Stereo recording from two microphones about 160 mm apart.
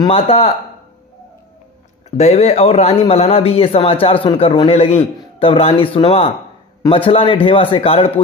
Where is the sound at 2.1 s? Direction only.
45° left (ahead or behind).